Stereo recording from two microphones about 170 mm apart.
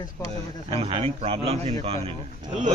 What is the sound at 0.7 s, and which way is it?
Speech, 35° right (ahead or behind).